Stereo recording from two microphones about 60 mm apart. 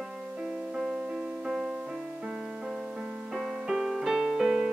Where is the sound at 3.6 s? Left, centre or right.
Centre.